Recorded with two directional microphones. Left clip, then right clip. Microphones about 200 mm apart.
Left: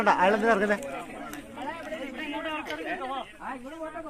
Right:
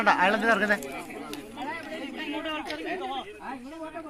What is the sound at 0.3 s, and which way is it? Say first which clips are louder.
Speech: even; 15° left (ahead or behind).